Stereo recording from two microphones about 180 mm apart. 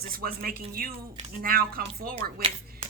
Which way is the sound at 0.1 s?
55° right (ahead or behind).